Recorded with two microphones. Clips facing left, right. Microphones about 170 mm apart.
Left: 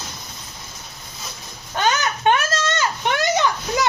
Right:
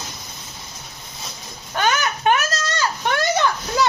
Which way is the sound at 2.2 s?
30° left (ahead or behind).